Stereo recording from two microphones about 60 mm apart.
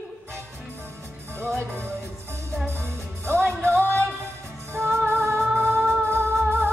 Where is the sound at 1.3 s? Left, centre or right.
Right.